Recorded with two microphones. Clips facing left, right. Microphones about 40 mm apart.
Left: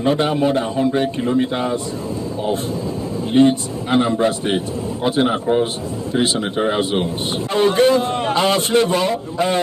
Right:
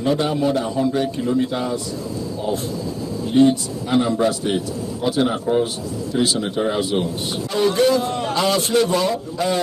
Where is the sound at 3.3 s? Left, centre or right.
Left.